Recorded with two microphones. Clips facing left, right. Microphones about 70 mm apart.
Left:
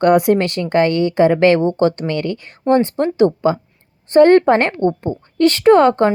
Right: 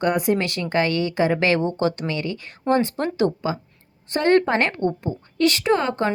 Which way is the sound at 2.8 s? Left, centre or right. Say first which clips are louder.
Left 7 dB; left.